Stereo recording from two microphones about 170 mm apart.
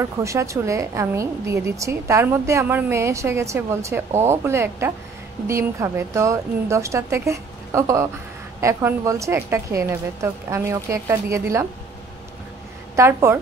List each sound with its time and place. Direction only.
0.0 s a woman's voice: 15° right (ahead or behind)
12.9 s a woman's voice: 15° right (ahead or behind)